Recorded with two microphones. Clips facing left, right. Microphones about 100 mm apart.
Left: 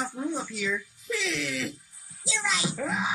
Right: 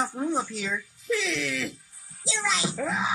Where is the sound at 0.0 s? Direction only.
35° right (ahead or behind).